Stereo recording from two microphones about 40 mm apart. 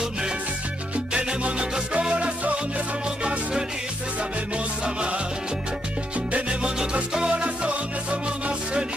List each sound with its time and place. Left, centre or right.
1.1 s music: right
4.8 s music: right
6.6 s music: right